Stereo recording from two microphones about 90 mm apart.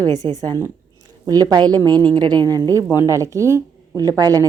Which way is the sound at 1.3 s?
45° right (ahead or behind).